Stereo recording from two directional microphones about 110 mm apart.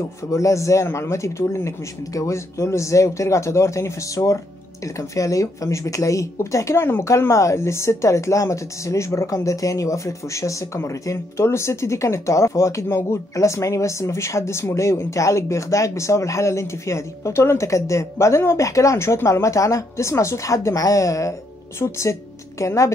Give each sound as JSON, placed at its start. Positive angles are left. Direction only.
{"t": 0.3, "sound": "speech", "side_deg": 25}